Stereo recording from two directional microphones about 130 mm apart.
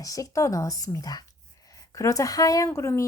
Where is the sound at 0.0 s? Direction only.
25° left (ahead or behind).